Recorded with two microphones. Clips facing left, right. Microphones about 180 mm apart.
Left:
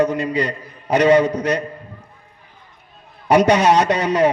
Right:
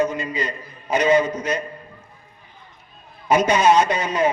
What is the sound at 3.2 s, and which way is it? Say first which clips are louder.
A man's voice: left 3 dB; 70° left (ahead or behind).